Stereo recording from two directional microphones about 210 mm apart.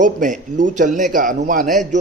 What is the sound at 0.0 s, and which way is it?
Speech, 35° right (ahead or behind).